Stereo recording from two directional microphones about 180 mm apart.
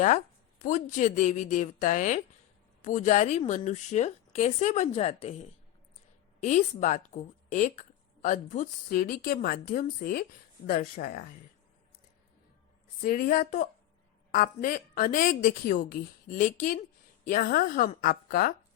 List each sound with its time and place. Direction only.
0.6 s a woman's voice: 45° left (ahead or behind)
13.0 s a woman's voice: 50° left (ahead or behind)